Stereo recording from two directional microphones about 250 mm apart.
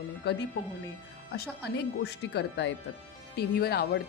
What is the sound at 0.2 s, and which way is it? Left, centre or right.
A woman's voice, left.